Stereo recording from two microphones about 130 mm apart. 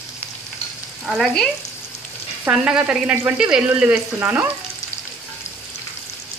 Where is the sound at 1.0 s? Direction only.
Centre (ahead or behind).